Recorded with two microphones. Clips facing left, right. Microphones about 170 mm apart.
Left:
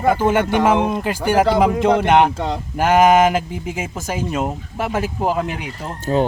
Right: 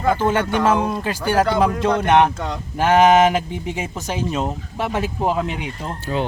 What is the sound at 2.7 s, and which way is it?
Speech, 10° left (ahead or behind).